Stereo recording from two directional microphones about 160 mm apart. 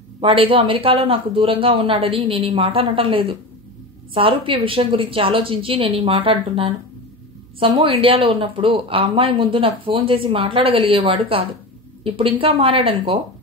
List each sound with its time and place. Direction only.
0.2 s speech: 35° right (ahead or behind)